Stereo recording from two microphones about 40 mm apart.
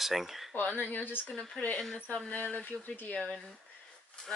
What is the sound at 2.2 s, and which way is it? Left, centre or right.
Speech, left.